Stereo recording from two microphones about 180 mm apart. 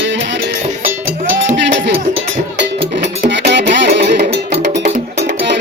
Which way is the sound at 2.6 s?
75° right (ahead or behind).